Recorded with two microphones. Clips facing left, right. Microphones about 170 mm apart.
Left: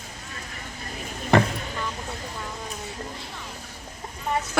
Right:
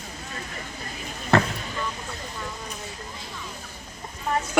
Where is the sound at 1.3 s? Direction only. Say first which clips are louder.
Left 1 dB; 15° left (ahead or behind).